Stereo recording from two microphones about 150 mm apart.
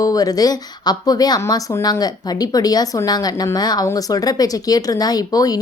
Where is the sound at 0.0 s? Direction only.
25° left (ahead or behind).